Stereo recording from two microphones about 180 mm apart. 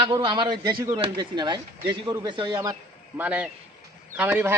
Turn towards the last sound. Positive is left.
turn(degrees=-10)  # may be behind; listen again after turning